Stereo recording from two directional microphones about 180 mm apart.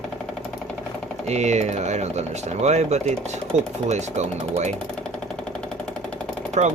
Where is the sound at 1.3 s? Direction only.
40° right (ahead or behind).